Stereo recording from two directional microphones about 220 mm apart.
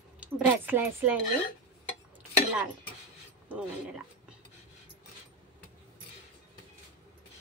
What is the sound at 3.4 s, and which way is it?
Speech, 5° right (ahead or behind).